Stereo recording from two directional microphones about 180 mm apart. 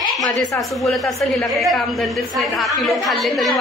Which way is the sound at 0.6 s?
Centre (ahead or behind).